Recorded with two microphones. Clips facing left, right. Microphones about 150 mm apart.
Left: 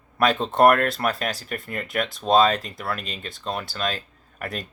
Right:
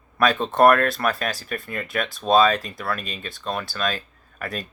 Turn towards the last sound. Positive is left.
turn(degrees=25)  # may be behind; listen again after turning